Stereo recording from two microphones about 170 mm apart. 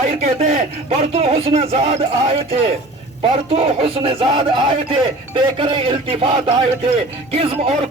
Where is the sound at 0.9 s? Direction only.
35° right (ahead or behind).